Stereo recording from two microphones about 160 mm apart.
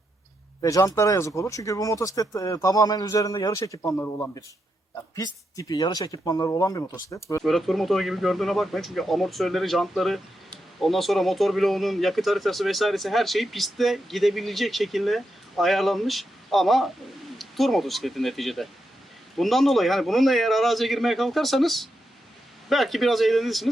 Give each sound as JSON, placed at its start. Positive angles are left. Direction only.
{"t": 0.6, "sound": "speech", "side_deg": 20}
{"t": 7.4, "sound": "speech", "side_deg": 0}